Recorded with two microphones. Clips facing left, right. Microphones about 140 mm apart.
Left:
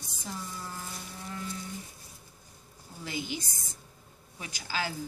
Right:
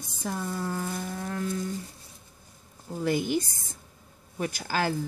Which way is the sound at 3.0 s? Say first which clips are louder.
Right 10 dB; 50° right (ahead or behind).